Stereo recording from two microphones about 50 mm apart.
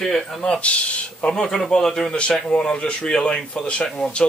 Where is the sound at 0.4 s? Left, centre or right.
Left.